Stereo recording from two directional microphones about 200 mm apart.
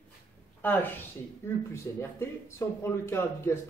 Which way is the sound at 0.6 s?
10° left (ahead or behind).